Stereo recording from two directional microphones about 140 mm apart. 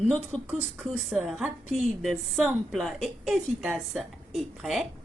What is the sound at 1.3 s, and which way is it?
A woman's voice, 5° right (ahead or behind).